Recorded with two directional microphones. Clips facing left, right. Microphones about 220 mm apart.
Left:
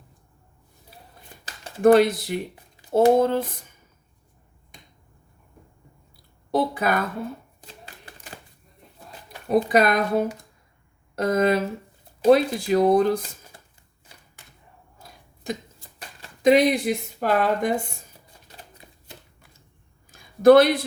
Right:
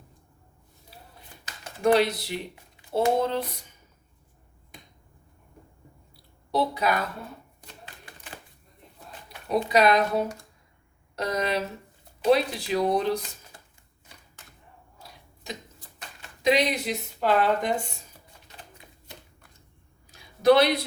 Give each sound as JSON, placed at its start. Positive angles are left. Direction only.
{"t": 1.5, "sound": "a sound", "side_deg": 35}
{"t": 1.8, "sound": "speech", "side_deg": 50}
{"t": 6.5, "sound": "speech", "side_deg": 50}
{"t": 9.5, "sound": "speech", "side_deg": 50}
{"t": 16.4, "sound": "speech", "side_deg": 50}
{"t": 20.1, "sound": "a sound", "side_deg": 50}